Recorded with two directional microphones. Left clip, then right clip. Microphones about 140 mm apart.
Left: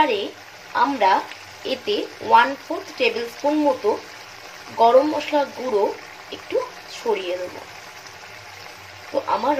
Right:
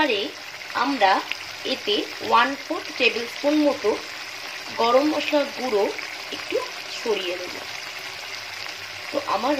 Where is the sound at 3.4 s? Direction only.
5° right (ahead or behind).